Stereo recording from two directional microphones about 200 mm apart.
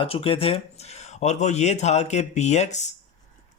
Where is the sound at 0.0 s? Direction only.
25° left (ahead or behind).